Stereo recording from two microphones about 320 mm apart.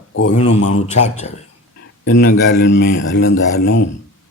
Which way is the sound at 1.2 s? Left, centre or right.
Left.